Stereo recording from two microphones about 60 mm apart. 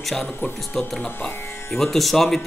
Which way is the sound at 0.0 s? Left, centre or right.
Centre.